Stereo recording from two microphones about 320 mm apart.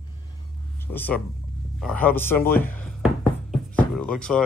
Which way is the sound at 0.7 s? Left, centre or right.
Centre.